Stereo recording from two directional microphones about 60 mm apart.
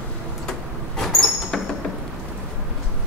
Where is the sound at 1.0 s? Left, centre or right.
Centre.